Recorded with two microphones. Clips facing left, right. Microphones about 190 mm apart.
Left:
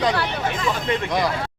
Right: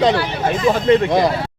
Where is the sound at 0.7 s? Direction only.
35° right (ahead or behind).